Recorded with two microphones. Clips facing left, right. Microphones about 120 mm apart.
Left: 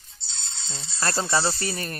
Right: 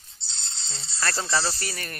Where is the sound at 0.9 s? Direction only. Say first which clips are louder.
Left 2 dB; 25° left (ahead or behind).